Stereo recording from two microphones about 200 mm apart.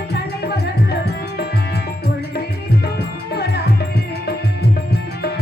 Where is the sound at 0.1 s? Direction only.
55° left (ahead or behind).